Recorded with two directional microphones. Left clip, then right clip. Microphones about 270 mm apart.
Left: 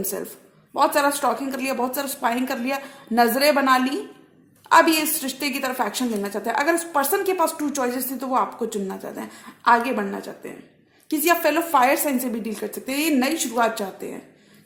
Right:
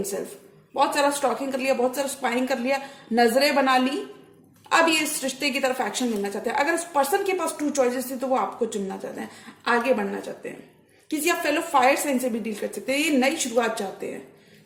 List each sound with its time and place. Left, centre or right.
0.7 s a woman's voice: left